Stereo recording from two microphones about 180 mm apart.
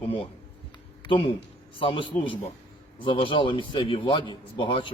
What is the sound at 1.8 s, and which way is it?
A man's voice, 30° left (ahead or behind).